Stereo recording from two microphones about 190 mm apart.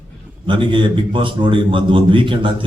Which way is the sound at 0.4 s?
25° right (ahead or behind).